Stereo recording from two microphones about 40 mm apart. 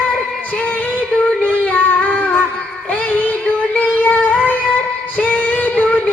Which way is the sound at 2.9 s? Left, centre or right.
Left.